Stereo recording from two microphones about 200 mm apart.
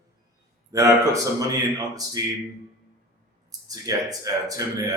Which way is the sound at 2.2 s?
20° right (ahead or behind).